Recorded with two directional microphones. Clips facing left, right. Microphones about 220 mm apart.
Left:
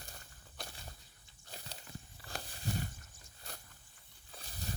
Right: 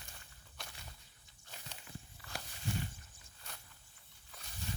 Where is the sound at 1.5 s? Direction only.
35° left (ahead or behind).